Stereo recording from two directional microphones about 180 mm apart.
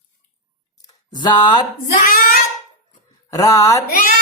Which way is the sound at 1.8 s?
50° left (ahead or behind).